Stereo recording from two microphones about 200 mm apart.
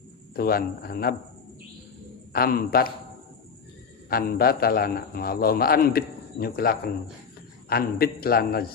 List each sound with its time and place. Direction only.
0.3 s a man's voice: 50° left (ahead or behind)
2.3 s a man's voice: 50° left (ahead or behind)
4.1 s a man's voice: 50° left (ahead or behind)